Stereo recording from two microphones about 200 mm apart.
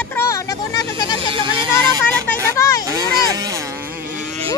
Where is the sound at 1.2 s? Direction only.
25° right (ahead or behind).